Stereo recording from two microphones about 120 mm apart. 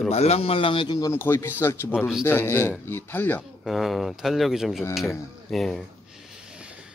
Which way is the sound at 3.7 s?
Centre (ahead or behind).